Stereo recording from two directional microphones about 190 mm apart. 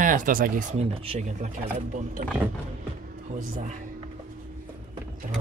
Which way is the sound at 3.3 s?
40° right (ahead or behind).